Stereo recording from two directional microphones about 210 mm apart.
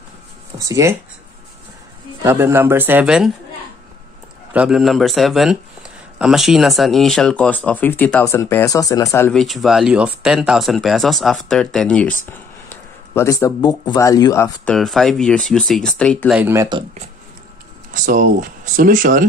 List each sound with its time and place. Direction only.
0.6 s speech: 15° right (ahead or behind)
2.2 s speech: 10° right (ahead or behind)
4.6 s speech: centre (ahead or behind); by 9.3 s 15° left (ahead or behind)
9.3 s speech: centre (ahead or behind)
14.7 s speech: centre (ahead or behind)
16.3 s speech: 10° right (ahead or behind)
17.9 s speech: 40° right (ahead or behind)